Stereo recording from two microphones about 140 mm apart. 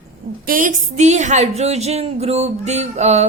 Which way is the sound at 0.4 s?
70° right (ahead or behind).